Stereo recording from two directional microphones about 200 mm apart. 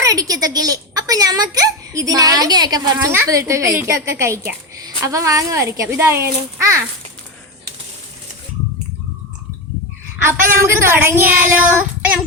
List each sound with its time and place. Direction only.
0.0 s speech: 20° right (ahead or behind)
10.7 s speech: 10° right (ahead or behind)